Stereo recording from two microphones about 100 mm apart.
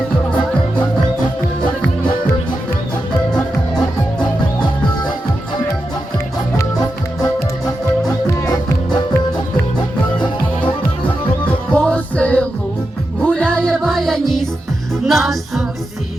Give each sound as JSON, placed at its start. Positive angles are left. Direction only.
{"t": 8.3, "sound": "music", "side_deg": 30}
{"t": 11.7, "sound": "music", "side_deg": 15}